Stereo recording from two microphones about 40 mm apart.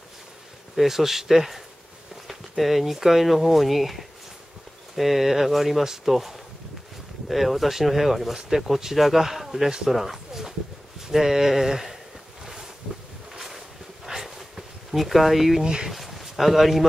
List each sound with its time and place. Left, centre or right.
0.7 s speech: centre
9.8 s pigeon: centre
11.1 s speech: centre
13.3 s boat: centre
14.0 s a sound: centre
14.9 s speech: centre
15.6 s speech: centre
15.9 s a sound: centre